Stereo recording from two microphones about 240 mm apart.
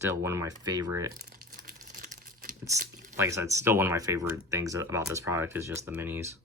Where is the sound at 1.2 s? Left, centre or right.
Right.